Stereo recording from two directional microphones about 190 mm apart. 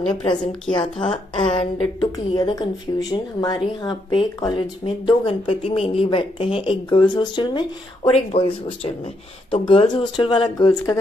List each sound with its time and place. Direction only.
0.1 s a woman's voice: 25° left (ahead or behind)